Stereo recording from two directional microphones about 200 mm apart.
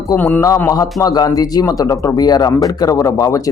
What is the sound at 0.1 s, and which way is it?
A man's voice, 10° left (ahead or behind).